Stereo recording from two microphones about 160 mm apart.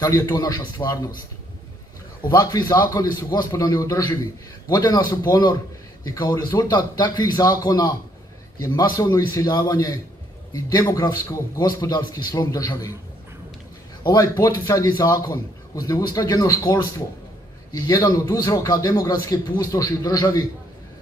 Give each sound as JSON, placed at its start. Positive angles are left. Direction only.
{"t": 0.0, "sound": "a man's voice", "side_deg": 20}
{"t": 2.2, "sound": "a man's voice", "side_deg": 20}
{"t": 14.0, "sound": "a man's voice", "side_deg": 20}